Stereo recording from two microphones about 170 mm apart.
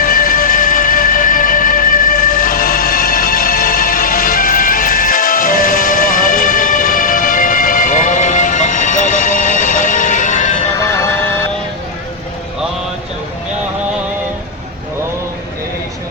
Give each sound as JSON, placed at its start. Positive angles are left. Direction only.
{"t": 0.0, "sound": "music", "side_deg": 55}